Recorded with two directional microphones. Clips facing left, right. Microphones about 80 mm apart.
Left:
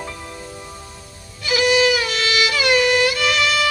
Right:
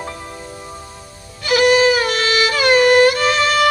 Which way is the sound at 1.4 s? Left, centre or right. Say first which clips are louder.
Right 4 dB; right.